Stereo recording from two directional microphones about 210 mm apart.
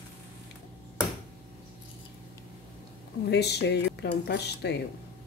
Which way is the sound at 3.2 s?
55° left (ahead or behind).